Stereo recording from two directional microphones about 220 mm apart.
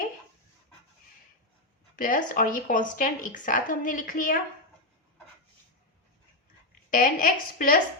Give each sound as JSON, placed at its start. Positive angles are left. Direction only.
{"t": 2.0, "sound": "a woman's voice", "side_deg": 40}
{"t": 6.9, "sound": "a woman's voice", "side_deg": 40}